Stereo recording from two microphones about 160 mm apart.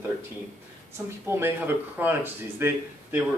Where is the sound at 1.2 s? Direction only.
15° right (ahead or behind).